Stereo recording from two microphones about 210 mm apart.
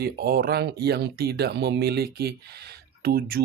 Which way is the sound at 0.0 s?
45° right (ahead or behind).